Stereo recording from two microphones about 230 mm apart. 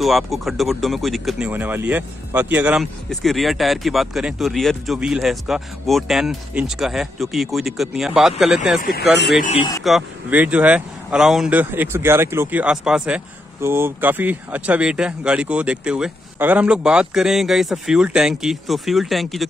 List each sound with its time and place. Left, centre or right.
0.0 s speech: centre
9.4 s speech: left
9.8 s speech: centre